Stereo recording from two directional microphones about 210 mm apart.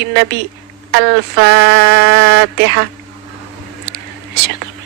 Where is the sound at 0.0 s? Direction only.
55° right (ahead or behind).